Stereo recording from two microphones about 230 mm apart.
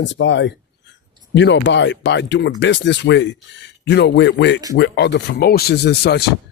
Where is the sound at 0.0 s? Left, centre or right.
Left.